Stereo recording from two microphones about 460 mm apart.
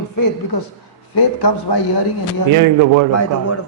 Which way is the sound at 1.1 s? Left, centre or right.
Left.